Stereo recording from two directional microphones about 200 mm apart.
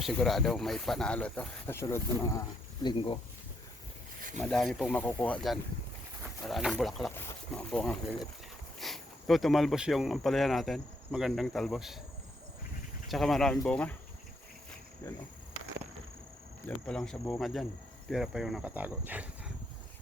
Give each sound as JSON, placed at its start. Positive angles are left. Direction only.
{"t": 0.0, "sound": "speech", "side_deg": 0}
{"t": 4.4, "sound": "speech", "side_deg": 5}
{"t": 7.1, "sound": "speech", "side_deg": 10}
{"t": 13.1, "sound": "speech", "side_deg": 0}
{"t": 13.7, "sound": "cricket", "side_deg": 5}
{"t": 15.0, "sound": "cricket", "side_deg": 10}
{"t": 16.6, "sound": "speech", "side_deg": 5}